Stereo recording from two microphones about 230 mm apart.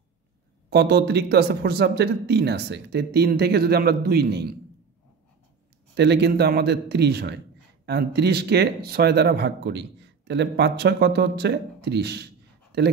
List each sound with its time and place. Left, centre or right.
0.7 s speech: right
5.9 s speech: right